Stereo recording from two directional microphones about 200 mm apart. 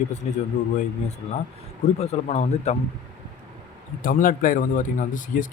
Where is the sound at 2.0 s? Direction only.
30° left (ahead or behind).